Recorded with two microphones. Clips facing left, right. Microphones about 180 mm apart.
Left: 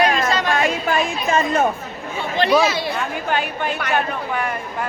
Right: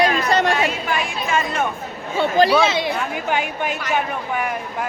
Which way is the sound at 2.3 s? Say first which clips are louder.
Right 1 dB; 40° right (ahead or behind).